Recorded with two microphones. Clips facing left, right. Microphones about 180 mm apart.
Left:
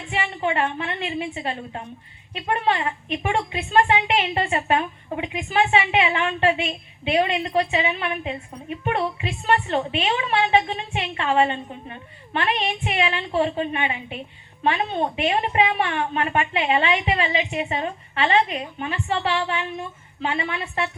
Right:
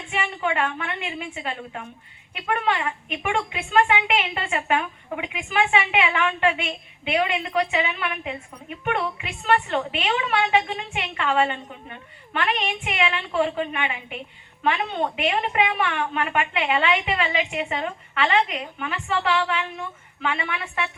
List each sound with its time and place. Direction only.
0.1 s a woman's voice: 30° left (ahead or behind)